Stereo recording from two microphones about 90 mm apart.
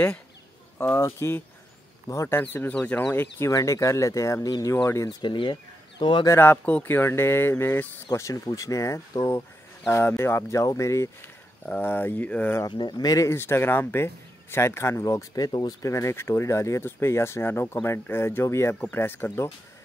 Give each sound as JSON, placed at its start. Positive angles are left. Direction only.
{"t": 0.7, "sound": "speech", "side_deg": 25}
{"t": 2.7, "sound": "speech", "side_deg": 15}
{"t": 3.1, "sound": "speech", "side_deg": 30}
{"t": 5.2, "sound": "speech", "side_deg": 60}
{"t": 6.2, "sound": "speech", "side_deg": 25}
{"t": 11.6, "sound": "speech", "side_deg": 20}
{"t": 12.6, "sound": "speech", "side_deg": 55}